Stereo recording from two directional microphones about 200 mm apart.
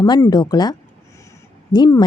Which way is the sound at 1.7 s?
20° left (ahead or behind).